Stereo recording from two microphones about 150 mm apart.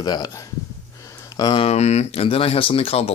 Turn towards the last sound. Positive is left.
turn(degrees=40)  # may be behind; listen again after turning